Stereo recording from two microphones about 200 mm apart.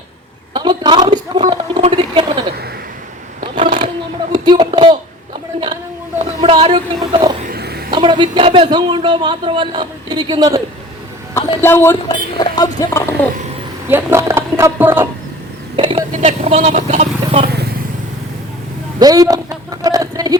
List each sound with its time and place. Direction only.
0.5 s speech: 20° right (ahead or behind)
3.5 s speech: 40° right (ahead or behind)
4.3 s a sound: 20° right (ahead or behind)
6.1 s speech: 30° right (ahead or behind)
7.4 s a sound: 50° right (ahead or behind)
7.9 s speech: 25° right (ahead or behind)
11.6 s speech: 10° left (ahead or behind)
13.8 s speech: 10° right (ahead or behind)
15.7 s speech: 25° right (ahead or behind)
17.4 s speech: 55° right (ahead or behind)
18.9 s a sound: 20° right (ahead or behind)